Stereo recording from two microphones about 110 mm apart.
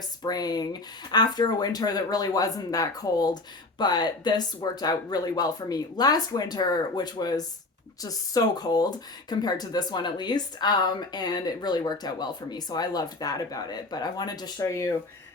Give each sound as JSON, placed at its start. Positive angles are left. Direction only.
{"t": 0.2, "sound": "speech", "side_deg": 35}